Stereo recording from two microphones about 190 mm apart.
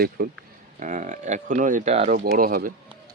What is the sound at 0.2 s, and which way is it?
Speech, 50° right (ahead or behind).